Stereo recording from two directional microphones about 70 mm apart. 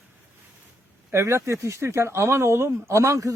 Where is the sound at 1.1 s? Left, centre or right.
Right.